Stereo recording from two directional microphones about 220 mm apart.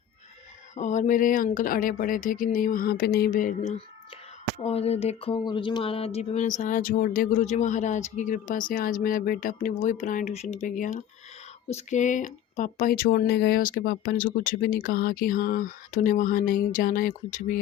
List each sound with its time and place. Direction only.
0.8 s speech: 35° left (ahead or behind)